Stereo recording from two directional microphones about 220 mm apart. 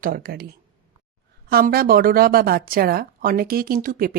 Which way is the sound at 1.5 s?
40° right (ahead or behind).